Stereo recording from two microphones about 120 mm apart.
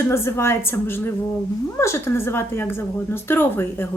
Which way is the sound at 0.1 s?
20° left (ahead or behind).